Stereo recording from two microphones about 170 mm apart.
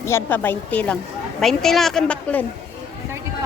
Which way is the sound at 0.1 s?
10° left (ahead or behind).